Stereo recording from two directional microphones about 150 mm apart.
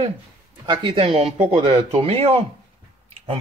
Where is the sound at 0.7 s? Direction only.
35° right (ahead or behind).